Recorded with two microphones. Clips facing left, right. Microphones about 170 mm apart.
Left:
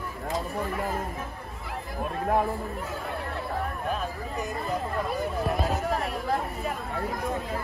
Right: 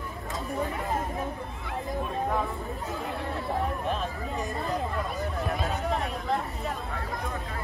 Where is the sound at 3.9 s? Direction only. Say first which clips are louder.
Even; centre (ahead or behind).